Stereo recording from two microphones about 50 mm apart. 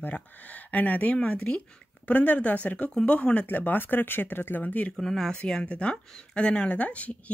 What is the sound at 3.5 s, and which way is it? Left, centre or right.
Speech, left.